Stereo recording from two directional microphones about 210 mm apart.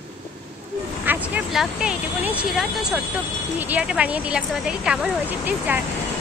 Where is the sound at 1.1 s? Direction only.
5° right (ahead or behind).